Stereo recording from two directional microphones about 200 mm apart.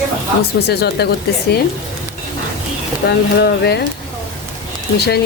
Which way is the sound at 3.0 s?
55° left (ahead or behind).